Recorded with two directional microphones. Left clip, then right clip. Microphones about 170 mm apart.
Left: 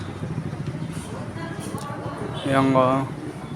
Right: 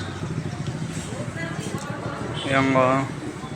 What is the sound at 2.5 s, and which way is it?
Speech, 25° left (ahead or behind).